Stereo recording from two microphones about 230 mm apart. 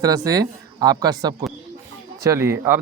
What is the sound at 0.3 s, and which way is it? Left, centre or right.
Speech, centre.